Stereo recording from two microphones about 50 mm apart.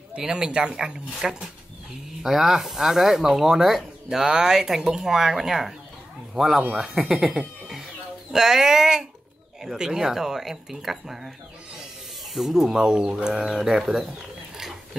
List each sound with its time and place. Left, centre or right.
0.2 s speech: centre